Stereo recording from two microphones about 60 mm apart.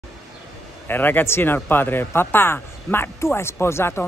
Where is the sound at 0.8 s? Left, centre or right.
Left.